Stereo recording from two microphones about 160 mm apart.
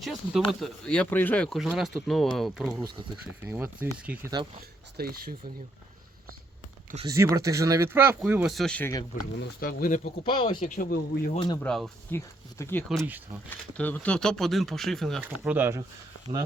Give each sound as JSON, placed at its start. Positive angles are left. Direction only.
{"t": 0.0, "sound": "speech", "side_deg": 0}
{"t": 3.4, "sound": "speech", "side_deg": -15}
{"t": 4.9, "sound": "speech", "side_deg": -70}
{"t": 7.0, "sound": "speech", "side_deg": -20}
{"t": 9.4, "sound": "speech", "side_deg": 65}
{"t": 10.2, "sound": "speech", "side_deg": 30}
{"t": 10.6, "sound": "speech", "side_deg": 65}
{"t": 11.3, "sound": "speech", "side_deg": 30}
{"t": 11.6, "sound": "speech", "side_deg": 5}
{"t": 12.1, "sound": "speech", "side_deg": 15}
{"t": 13.1, "sound": "speech", "side_deg": -10}
{"t": 13.5, "sound": "speech", "side_deg": 10}
{"t": 15.2, "sound": "speech", "side_deg": -10}